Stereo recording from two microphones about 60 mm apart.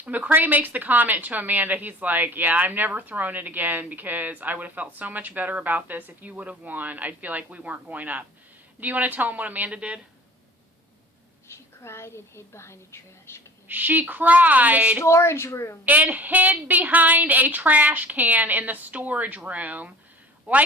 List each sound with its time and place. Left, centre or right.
0.0 s a woman's voice: right
11.4 s a woman's voice: left
13.7 s a woman's voice: right
15.0 s speech: left
15.9 s a woman's voice: right